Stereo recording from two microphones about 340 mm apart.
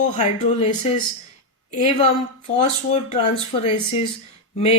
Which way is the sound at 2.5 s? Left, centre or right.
Centre.